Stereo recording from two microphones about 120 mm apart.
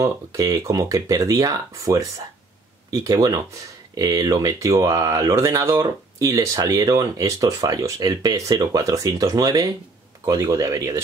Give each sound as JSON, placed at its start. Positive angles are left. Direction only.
{"t": 0.0, "sound": "speech", "side_deg": -25}